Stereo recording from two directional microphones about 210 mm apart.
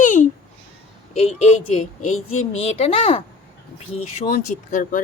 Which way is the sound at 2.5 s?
30° left (ahead or behind).